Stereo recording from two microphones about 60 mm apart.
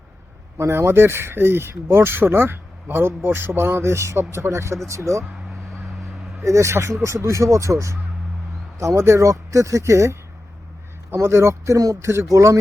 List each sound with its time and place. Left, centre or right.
0.7 s speech: right
6.4 s speech: right